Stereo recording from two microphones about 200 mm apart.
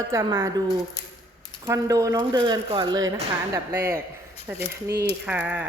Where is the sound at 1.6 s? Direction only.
15° right (ahead or behind).